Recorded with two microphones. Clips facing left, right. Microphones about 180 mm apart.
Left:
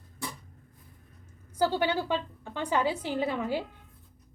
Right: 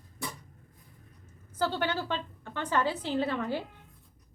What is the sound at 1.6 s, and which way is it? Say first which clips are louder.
A woman's voice: left 3 dB; 10° left (ahead or behind).